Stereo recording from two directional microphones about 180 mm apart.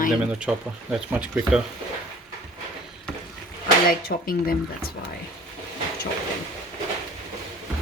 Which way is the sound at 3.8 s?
55° left (ahead or behind).